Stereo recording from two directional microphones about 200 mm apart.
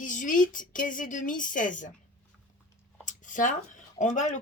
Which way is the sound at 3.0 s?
40° left (ahead or behind).